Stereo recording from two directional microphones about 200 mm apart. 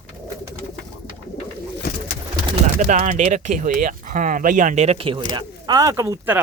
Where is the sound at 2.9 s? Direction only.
40° right (ahead or behind).